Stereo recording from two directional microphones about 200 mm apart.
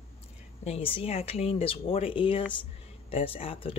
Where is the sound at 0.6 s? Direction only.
30° left (ahead or behind).